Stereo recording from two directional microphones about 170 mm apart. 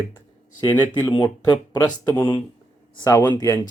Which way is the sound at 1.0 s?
25° left (ahead or behind).